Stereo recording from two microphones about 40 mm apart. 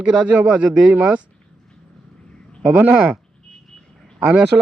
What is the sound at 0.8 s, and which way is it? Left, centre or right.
Speech, right.